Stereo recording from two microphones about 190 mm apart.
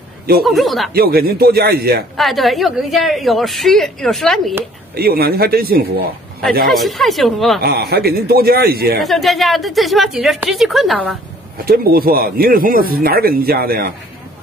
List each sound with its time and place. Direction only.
0.5 s a woman's voice: centre (ahead or behind)
0.9 s a man's voice: 55° right (ahead or behind)
2.1 s a woman's voice: centre (ahead or behind)
4.9 s speech: 50° right (ahead or behind)
6.7 s a woman's voice: centre (ahead or behind)
7.6 s a man's voice: 55° right (ahead or behind)
9.0 s a woman's voice: centre (ahead or behind)
11.5 s speech: 50° right (ahead or behind)